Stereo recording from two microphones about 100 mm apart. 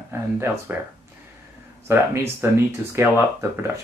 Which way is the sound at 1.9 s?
25° right (ahead or behind).